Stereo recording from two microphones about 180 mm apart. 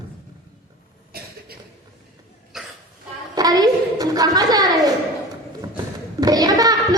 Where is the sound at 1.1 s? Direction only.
55° right (ahead or behind).